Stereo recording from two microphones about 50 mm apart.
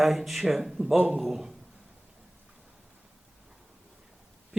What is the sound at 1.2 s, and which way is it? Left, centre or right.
Speech, centre.